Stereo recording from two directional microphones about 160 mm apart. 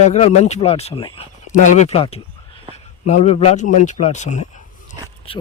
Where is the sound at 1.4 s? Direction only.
50° left (ahead or behind).